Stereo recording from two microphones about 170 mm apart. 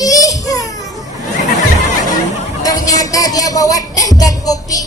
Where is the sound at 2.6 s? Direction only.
20° left (ahead or behind).